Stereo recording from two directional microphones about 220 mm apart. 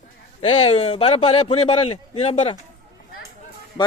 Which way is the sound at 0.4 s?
30° left (ahead or behind).